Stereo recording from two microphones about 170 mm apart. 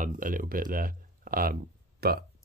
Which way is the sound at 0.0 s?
55° right (ahead or behind).